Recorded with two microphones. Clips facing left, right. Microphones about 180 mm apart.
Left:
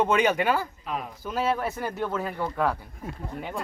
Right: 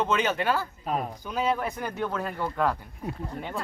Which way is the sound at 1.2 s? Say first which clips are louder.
Left 2 dB; centre (ahead or behind).